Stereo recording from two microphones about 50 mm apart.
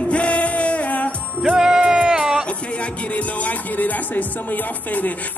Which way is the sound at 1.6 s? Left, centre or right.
Centre.